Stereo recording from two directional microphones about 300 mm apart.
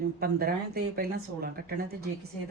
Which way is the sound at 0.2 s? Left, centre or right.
Right.